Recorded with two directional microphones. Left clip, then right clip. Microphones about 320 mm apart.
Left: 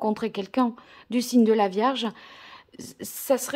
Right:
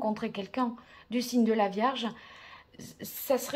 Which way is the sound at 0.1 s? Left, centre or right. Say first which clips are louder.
Left 7 dB; centre.